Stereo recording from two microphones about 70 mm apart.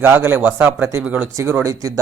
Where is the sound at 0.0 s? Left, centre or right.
Right.